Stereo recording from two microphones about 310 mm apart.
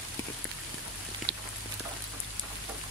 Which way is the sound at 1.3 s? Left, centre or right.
Right.